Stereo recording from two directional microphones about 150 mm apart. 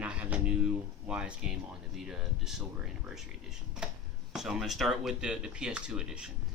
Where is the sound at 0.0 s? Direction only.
10° right (ahead or behind).